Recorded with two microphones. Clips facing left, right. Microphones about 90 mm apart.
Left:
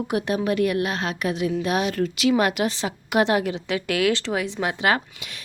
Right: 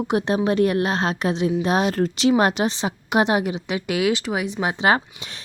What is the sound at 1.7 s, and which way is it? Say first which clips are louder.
Speech: right 3 dB; 35° right (ahead or behind).